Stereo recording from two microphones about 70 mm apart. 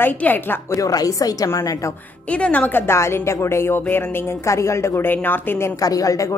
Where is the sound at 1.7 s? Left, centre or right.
Left.